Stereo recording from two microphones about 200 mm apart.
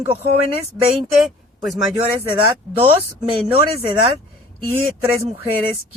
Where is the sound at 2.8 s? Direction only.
30° right (ahead or behind).